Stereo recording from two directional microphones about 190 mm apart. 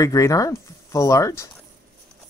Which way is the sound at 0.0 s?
15° left (ahead or behind).